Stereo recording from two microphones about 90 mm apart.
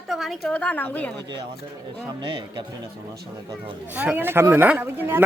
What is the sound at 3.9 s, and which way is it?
Speech, 20° right (ahead or behind).